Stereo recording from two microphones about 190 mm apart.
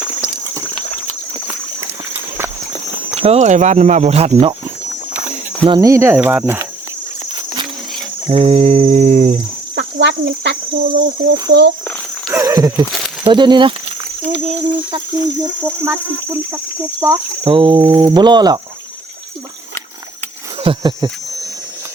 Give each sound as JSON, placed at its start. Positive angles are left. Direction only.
{"t": 1.8, "sound": "a sound", "side_deg": -10}
{"t": 3.2, "sound": "speech", "side_deg": -35}
{"t": 5.6, "sound": "speech", "side_deg": -20}
{"t": 7.3, "sound": "a sound", "side_deg": -25}
{"t": 8.3, "sound": "speech", "side_deg": -30}
{"t": 9.7, "sound": "speech", "side_deg": -65}
{"t": 12.3, "sound": "speech", "side_deg": -15}
{"t": 15.8, "sound": "speech", "side_deg": -15}
{"t": 20.6, "sound": "wild animals", "side_deg": -25}